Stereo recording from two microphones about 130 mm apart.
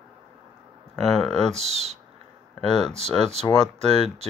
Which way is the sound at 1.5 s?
55° right (ahead or behind).